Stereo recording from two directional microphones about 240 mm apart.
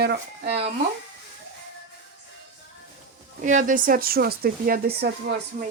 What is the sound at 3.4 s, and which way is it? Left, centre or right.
Speech, right.